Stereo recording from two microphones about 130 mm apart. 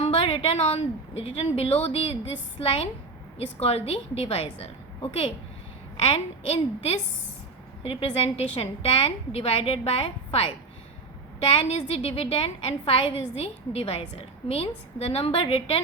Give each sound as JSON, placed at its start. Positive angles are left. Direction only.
{"t": 0.0, "sound": "a woman's voice", "side_deg": 50}
{"t": 3.3, "sound": "a woman's voice", "side_deg": 50}
{"t": 6.0, "sound": "a woman's voice", "side_deg": 45}